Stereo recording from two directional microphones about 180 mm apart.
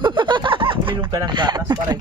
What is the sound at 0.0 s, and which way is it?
Speech, 25° right (ahead or behind).